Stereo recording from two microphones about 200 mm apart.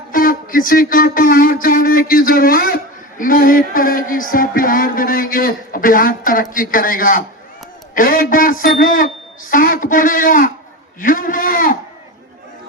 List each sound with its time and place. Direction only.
0.1 s a man's voice: 45° left (ahead or behind)